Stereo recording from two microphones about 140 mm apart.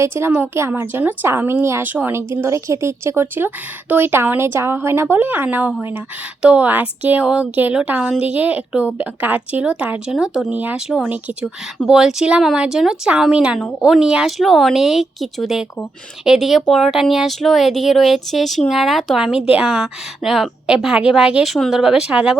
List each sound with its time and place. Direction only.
0.0 s a woman's voice: 15° right (ahead or behind)